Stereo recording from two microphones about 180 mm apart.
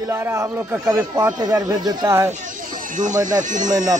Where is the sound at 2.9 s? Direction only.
45° right (ahead or behind).